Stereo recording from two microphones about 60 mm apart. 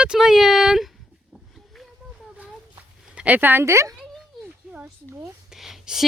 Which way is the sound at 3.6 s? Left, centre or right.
Right.